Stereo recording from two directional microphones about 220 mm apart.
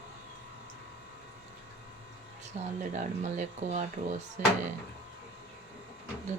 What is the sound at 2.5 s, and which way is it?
Speech, 30° right (ahead or behind).